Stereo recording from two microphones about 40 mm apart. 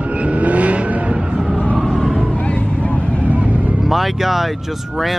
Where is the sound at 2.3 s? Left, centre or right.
Left.